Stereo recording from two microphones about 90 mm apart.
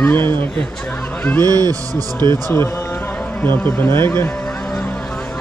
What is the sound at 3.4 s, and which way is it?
Speech, 20° left (ahead or behind).